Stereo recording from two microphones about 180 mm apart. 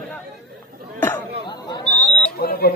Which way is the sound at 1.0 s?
10° left (ahead or behind).